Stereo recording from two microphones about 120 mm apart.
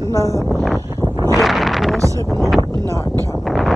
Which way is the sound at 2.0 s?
25° right (ahead or behind).